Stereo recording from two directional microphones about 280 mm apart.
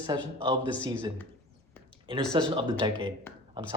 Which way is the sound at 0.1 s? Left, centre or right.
Centre.